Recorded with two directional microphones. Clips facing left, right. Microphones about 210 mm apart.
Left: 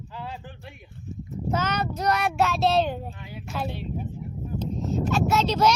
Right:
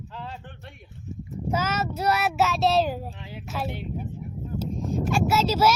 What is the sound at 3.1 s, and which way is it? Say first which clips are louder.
Speech: even; 25° right (ahead or behind).